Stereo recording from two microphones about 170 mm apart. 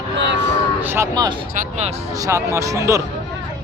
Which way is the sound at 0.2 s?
90° right.